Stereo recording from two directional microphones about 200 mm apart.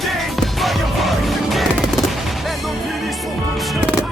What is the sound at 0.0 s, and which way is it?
Music, centre (ahead or behind).